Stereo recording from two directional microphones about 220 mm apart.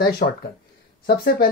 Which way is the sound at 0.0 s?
45° left (ahead or behind).